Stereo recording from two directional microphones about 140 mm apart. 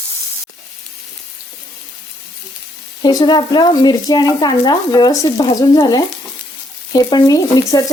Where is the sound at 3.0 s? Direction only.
30° left (ahead or behind).